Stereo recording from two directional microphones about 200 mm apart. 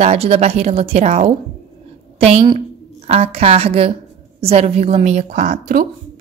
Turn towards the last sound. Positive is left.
turn(degrees=-45)  # may be behind; listen again after turning